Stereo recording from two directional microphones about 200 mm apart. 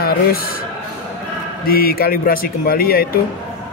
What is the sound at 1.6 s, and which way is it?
Speech, 45° left (ahead or behind).